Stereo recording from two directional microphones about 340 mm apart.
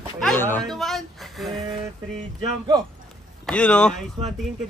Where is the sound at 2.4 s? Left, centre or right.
Centre.